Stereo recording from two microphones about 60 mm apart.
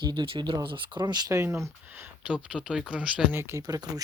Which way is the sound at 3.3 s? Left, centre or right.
Right.